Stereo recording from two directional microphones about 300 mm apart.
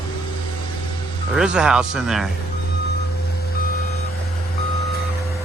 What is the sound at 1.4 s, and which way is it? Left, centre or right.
Speech, centre.